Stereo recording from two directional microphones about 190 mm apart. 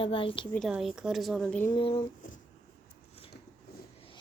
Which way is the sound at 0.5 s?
Centre (ahead or behind).